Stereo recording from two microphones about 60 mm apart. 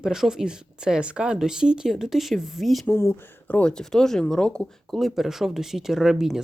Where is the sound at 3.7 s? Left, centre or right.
Centre.